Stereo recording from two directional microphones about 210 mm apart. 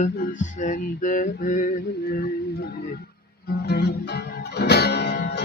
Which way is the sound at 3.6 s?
55° left (ahead or behind).